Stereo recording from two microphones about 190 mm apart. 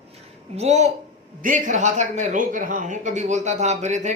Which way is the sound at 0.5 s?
35° right (ahead or behind).